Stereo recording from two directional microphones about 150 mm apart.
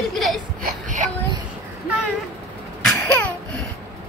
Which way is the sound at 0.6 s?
60° right (ahead or behind).